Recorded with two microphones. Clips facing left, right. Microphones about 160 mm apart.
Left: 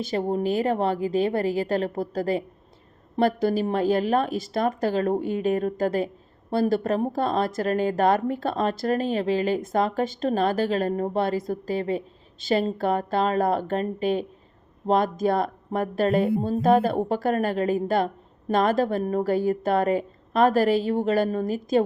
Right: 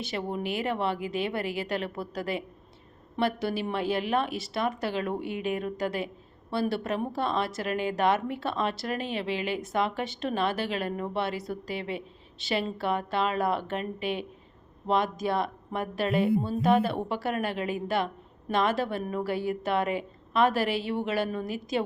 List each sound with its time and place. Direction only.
0.1 s a woman's voice: 40° left (ahead or behind)